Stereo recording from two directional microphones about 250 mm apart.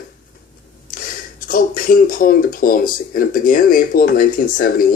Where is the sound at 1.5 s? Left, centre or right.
Left.